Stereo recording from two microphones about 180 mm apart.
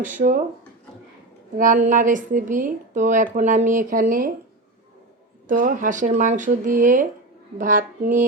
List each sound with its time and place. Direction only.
1.5 s a woman's voice: 50° right (ahead or behind)
5.5 s a woman's voice: 50° right (ahead or behind)